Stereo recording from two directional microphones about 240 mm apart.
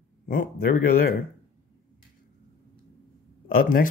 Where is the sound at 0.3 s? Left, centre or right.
Left.